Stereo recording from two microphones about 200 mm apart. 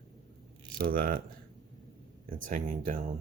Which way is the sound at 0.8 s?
45° right (ahead or behind).